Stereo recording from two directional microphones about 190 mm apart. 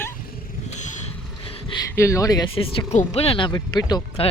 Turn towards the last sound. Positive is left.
turn(degrees=25)  # may be behind; listen again after turning